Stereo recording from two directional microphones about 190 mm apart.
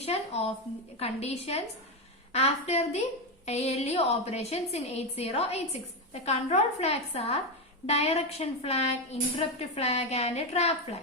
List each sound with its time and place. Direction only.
0.0 s a woman's voice: 35° left (ahead or behind)